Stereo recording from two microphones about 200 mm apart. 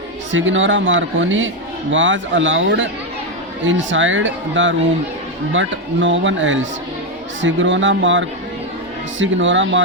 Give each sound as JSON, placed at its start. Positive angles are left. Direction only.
{"t": 0.3, "sound": "speech", "side_deg": -70}